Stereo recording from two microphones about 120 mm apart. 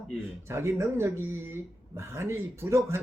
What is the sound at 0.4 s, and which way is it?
Speech, 20° right (ahead or behind).